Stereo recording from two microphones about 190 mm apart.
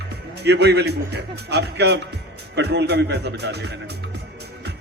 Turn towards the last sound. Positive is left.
turn(degrees=-60)  # may be behind; listen again after turning